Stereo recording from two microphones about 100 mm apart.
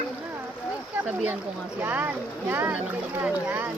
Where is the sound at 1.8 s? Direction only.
20° right (ahead or behind).